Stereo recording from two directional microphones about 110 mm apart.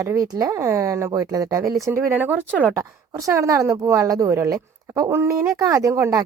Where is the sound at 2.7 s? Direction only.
25° right (ahead or behind).